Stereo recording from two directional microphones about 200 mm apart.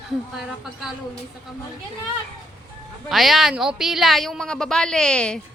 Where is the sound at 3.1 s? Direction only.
Centre (ahead or behind).